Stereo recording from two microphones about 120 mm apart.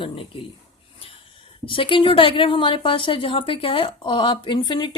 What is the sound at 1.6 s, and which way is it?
A woman's voice, 45° left (ahead or behind).